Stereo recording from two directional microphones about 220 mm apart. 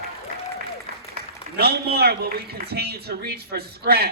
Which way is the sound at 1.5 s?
45° right (ahead or behind).